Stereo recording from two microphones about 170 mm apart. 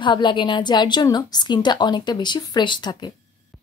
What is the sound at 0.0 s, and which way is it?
A woman's voice, 30° left (ahead or behind).